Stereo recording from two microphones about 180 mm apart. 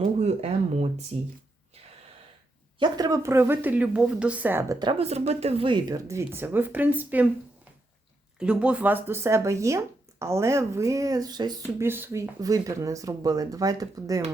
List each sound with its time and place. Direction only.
0.0 s speech: 35° right (ahead or behind)
2.7 s speech: 25° right (ahead or behind)
4.8 s speech: 30° right (ahead or behind); by 7.3 s 10° right (ahead or behind)
8.4 s speech: 5° right (ahead or behind); by 11.9 s 20° right (ahead or behind)
11.9 s speech: 10° right (ahead or behind)